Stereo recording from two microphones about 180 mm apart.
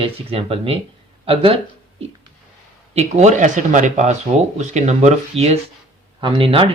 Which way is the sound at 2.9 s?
40° right (ahead or behind).